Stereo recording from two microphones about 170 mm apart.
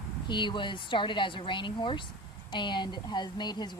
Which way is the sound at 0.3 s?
25° left (ahead or behind).